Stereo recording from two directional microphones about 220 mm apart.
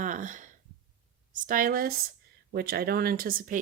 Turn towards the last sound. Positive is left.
turn(degrees=-40)  # may be behind; listen again after turning